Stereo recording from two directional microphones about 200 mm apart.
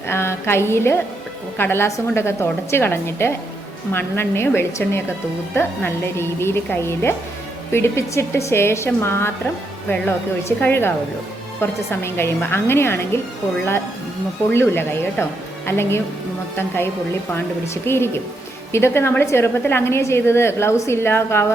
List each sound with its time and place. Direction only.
0.1 s a woman's voice: 10° left (ahead or behind)
10.6 s a woman's voice: 10° left (ahead or behind)
14.5 s a woman's voice: 10° left (ahead or behind)